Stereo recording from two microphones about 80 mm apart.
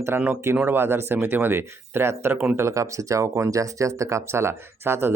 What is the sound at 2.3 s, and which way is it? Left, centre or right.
Speech, centre.